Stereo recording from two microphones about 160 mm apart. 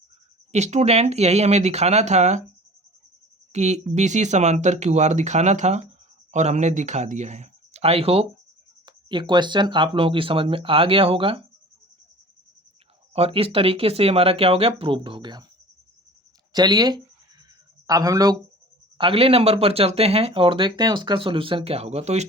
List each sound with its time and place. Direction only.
0.5 s speech: 45° right (ahead or behind)
3.5 s speech: 45° right (ahead or behind)
13.1 s speech: 35° right (ahead or behind)
16.5 s speech: 25° right (ahead or behind)
18.9 s speech: 35° right (ahead or behind)